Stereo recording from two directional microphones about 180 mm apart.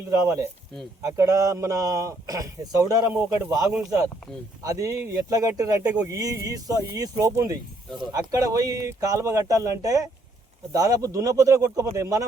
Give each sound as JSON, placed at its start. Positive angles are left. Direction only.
{"t": 1.0, "sound": "a man's voice", "side_deg": -15}